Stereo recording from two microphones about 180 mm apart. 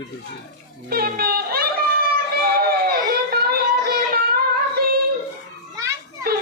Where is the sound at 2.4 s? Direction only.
60° right (ahead or behind).